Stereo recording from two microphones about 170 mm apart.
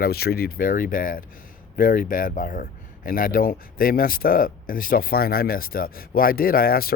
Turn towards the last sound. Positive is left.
turn(degrees=60)  # may be behind; listen again after turning